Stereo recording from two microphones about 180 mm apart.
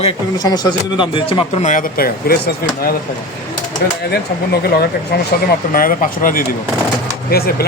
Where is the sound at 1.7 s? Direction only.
55° left (ahead or behind).